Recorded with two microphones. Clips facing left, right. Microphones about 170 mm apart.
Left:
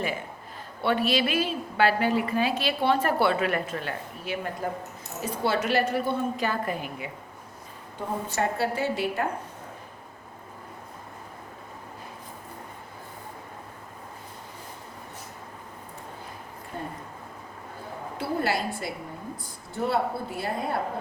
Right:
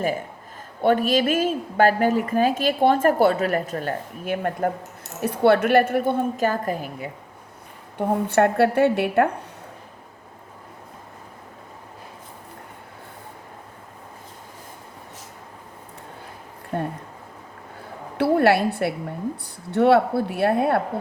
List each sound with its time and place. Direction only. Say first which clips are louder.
0.8 s a woman's voice: right 5 dB; 45° right (ahead or behind)
7.9 s speech: right 10 dB; 60° right (ahead or behind)
16.7 s speech: right 9 dB; 65° right (ahead or behind)
18.2 s a woman's voice: right 10 dB; 65° right (ahead or behind)